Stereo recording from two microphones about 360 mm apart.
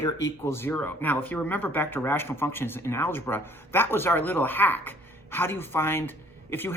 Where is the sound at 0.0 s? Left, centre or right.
Centre.